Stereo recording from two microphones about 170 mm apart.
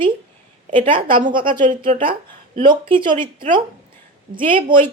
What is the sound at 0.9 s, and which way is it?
Speech, 30° right (ahead or behind).